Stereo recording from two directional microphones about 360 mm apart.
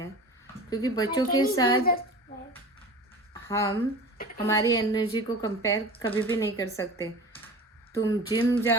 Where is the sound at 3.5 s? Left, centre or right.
Centre.